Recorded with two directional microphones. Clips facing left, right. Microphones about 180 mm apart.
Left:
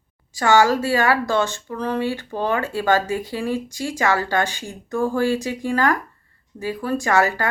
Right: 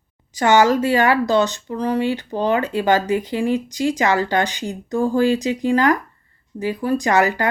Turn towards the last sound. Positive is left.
turn(degrees=-20)  # may be behind; listen again after turning